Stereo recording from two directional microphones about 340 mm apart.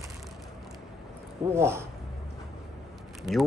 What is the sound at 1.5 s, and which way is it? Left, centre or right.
Speech, centre.